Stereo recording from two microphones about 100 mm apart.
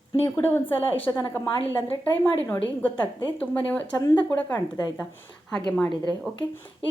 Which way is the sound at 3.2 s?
15° left (ahead or behind).